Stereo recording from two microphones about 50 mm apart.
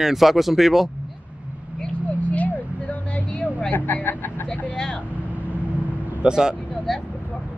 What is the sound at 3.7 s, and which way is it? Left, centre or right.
Speech, left.